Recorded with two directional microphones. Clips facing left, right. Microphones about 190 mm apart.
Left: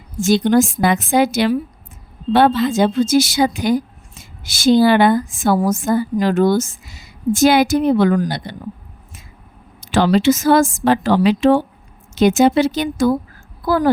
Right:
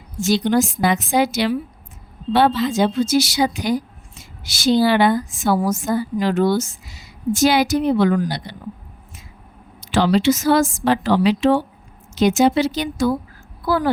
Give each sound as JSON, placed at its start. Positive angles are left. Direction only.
{"t": 0.2, "sound": "a woman's voice", "side_deg": 50}
{"t": 9.8, "sound": "a woman's voice", "side_deg": 50}